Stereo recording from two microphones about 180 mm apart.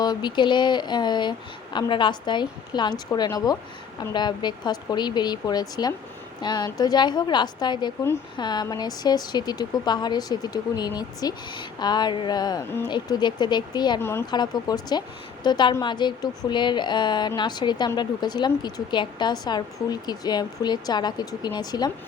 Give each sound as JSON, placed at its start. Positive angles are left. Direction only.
{"t": 0.0, "sound": "speech", "side_deg": 25}
{"t": 14.0, "sound": "speech", "side_deg": 15}